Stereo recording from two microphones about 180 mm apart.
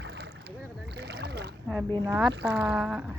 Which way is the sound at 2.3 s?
70° right (ahead or behind).